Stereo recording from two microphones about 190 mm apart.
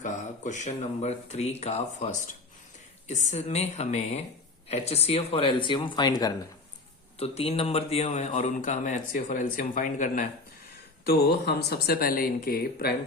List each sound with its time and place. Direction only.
0.0 s a man's voice: 40° left (ahead or behind); by 6.3 s 20° left (ahead or behind)
7.2 s a man's voice: 30° left (ahead or behind)
11.0 s speech: 55° left (ahead or behind)